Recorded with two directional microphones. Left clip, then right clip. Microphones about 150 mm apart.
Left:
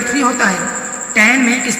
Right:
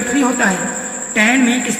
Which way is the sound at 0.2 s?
45° right (ahead or behind).